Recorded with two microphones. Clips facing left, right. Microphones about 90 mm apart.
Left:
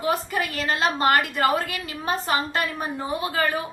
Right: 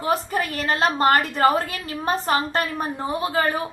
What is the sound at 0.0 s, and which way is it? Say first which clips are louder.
A woman's voice: right 2 dB; 35° right (ahead or behind).